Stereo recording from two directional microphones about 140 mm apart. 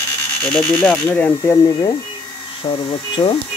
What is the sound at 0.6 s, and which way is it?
Speech, 15° left (ahead or behind).